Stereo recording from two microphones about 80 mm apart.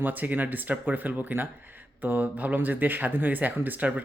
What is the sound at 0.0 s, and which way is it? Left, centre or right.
Speech, right.